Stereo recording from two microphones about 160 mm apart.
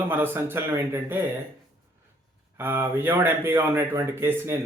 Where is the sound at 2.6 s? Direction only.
15° right (ahead or behind).